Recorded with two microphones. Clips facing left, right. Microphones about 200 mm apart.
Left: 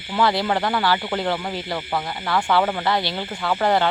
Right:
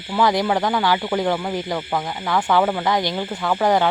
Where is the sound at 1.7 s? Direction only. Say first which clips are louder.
Right 2 dB; centre (ahead or behind).